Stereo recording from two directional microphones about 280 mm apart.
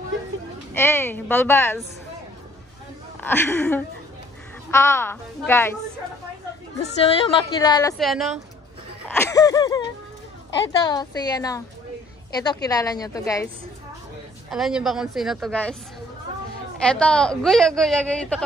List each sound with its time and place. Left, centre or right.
0.7 s a woman's voice: centre
3.2 s a woman's voice: centre
6.8 s a woman's voice: centre
8.0 s a woman's voice: centre
9.1 s a woman's voice: centre
12.6 s a woman's voice: centre
14.5 s a woman's voice: centre
16.8 s a woman's voice: centre